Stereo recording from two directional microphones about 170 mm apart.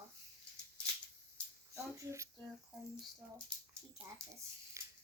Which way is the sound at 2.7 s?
5° right (ahead or behind).